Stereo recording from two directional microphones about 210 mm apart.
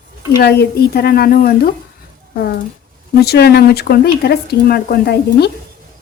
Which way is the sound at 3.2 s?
50° left (ahead or behind).